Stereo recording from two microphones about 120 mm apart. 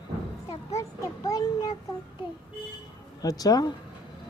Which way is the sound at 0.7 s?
25° left (ahead or behind).